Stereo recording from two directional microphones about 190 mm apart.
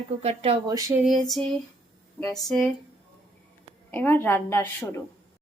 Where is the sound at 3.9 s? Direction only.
10° left (ahead or behind).